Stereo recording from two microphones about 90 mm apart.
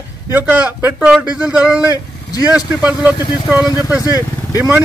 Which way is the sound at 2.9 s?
20° right (ahead or behind).